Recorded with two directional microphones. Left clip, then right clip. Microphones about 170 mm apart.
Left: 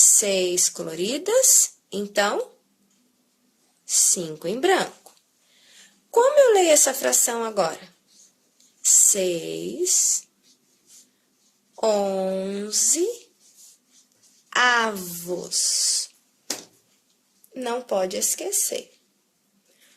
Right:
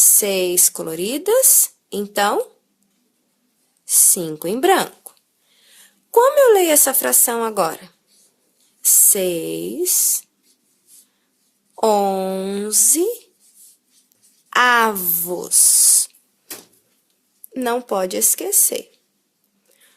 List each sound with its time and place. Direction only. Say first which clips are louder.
0.2 s speech: right 3 dB; 35° right (ahead or behind)
3.8 s speech: right 3 dB; 35° right (ahead or behind)
6.1 s speech: right 4 dB; 40° right (ahead or behind)
11.7 s speech: right 5 dB; 35° right (ahead or behind)
14.5 s speech: right 5 dB; 35° right (ahead or behind)
17.5 s a woman's voice: right 5 dB; 50° right (ahead or behind)